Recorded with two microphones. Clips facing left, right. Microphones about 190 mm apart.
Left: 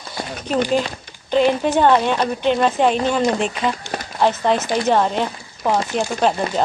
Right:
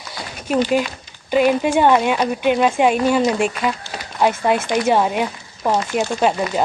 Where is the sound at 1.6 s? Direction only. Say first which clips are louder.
Even; 10° right (ahead or behind).